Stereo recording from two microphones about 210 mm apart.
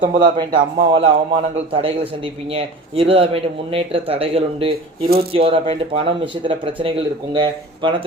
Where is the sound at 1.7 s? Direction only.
25° right (ahead or behind).